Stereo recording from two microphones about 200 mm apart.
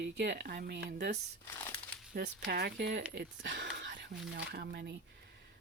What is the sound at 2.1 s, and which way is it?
Speech, 55° right (ahead or behind).